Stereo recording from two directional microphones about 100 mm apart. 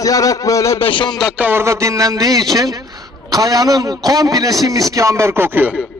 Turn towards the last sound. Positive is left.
turn(degrees=-20)  # may be behind; listen again after turning